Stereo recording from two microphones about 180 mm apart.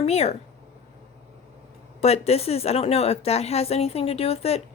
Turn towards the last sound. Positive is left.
turn(degrees=35)  # may be behind; listen again after turning